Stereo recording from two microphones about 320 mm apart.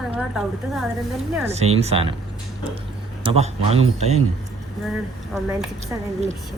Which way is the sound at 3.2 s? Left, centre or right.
Centre.